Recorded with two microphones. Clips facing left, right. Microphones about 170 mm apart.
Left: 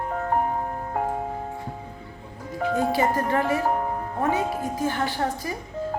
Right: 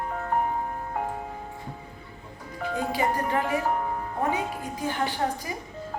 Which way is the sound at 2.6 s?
40° left (ahead or behind).